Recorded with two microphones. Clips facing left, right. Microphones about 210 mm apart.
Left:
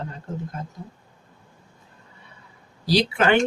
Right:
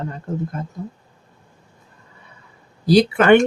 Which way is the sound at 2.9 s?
55° right (ahead or behind).